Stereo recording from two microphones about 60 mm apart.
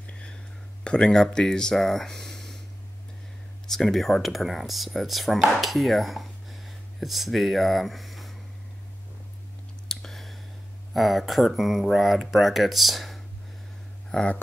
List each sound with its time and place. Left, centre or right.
0.0 s whispering: centre
0.8 s speech: centre
3.6 s speech: centre
9.8 s clicking: centre
10.9 s speech: centre
14.1 s speech: centre